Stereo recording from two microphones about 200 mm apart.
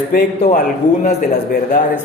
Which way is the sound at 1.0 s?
40° left (ahead or behind).